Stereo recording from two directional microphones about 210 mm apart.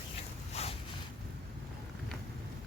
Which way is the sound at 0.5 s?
30° left (ahead or behind).